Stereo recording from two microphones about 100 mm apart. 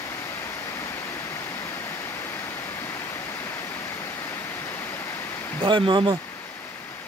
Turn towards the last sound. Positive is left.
turn(degrees=-55)  # may be behind; listen again after turning